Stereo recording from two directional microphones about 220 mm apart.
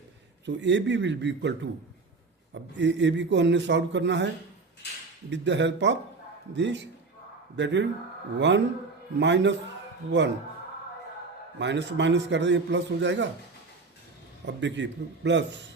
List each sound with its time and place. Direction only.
0.4 s a man's voice: 55° right (ahead or behind)
5.3 s a man's voice: 55° right (ahead or behind)
11.6 s a man's voice: 55° right (ahead or behind)
14.4 s a man's voice: 55° right (ahead or behind)